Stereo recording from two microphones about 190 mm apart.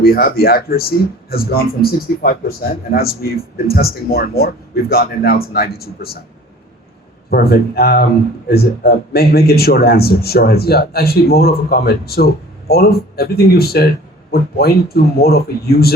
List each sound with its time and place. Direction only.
0.0 s speech: 55° left (ahead or behind)
7.3 s a man's voice: 55° left (ahead or behind)